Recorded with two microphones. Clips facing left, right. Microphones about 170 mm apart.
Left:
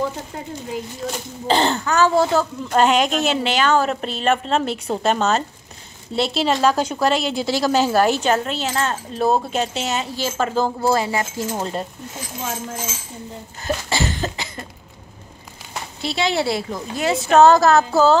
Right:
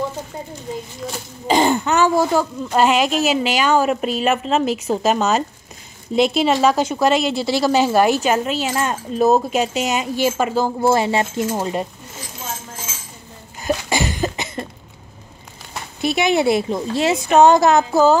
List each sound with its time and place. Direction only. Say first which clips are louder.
1.5 s speech: right 3 dB; 10° right (ahead or behind)
6.4 s speech: right 2 dB; 5° right (ahead or behind)
10.8 s speech: right 3 dB; 25° right (ahead or behind)
11.5 s speech: right 1 dB; 10° right (ahead or behind)
13.7 s cough: right 2 dB; 15° right (ahead or behind)
16.0 s speech: right 4 dB; 20° right (ahead or behind)